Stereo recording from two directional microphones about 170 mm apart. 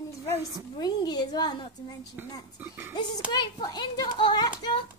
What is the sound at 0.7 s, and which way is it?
A child's voice, 25° left (ahead or behind).